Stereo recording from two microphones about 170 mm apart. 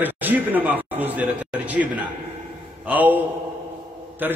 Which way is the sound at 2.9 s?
10° right (ahead or behind).